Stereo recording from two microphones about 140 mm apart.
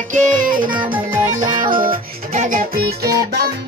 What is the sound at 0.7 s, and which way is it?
Music, 35° right (ahead or behind).